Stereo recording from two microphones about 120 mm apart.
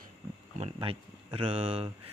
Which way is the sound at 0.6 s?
50° right (ahead or behind).